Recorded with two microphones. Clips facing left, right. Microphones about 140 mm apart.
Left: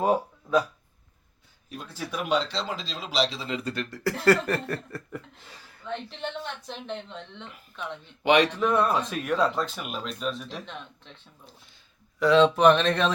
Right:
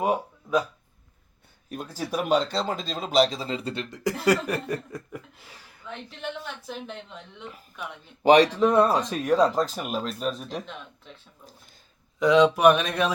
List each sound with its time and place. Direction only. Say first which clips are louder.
0.0 s a sound: left 1 dB; 10° right (ahead or behind)
1.7 s speech: right 5 dB; 45° right (ahead or behind); by 5.2 s 15° right (ahead or behind)
5.8 s speech: left 2 dB; 5° right (ahead or behind)
8.2 s speech: right 4 dB; 40° right (ahead or behind)
10.7 s speech: even; 5° right (ahead or behind)
12.2 s speech: right 1 dB; 15° right (ahead or behind)